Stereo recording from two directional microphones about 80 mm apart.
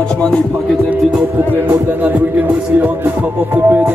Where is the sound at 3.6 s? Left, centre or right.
Right.